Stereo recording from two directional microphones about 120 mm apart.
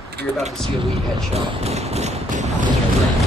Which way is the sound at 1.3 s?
60° right (ahead or behind).